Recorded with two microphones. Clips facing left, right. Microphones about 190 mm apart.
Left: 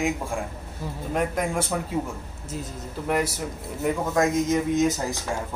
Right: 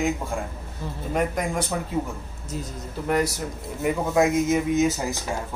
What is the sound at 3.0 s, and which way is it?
Speech, centre (ahead or behind).